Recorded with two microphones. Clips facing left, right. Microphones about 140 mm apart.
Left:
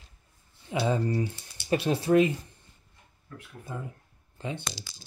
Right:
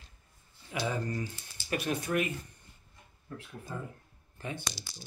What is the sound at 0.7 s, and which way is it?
Speech, 25° left (ahead or behind).